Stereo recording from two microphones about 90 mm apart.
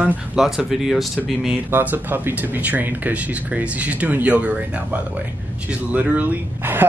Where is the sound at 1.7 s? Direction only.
20° right (ahead or behind).